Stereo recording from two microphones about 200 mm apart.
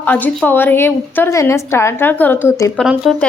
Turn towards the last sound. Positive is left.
turn(degrees=0)  # may be behind; listen again after turning